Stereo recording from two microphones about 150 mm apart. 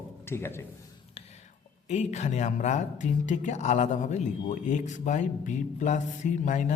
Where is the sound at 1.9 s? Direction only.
50° left (ahead or behind).